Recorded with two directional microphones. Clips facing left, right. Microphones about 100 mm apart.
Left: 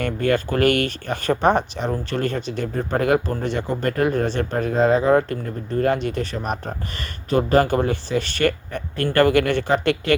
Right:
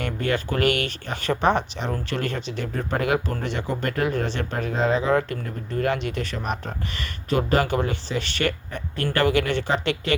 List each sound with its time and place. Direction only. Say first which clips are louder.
0.0 s speech: left 5 dB; 45° left (ahead or behind)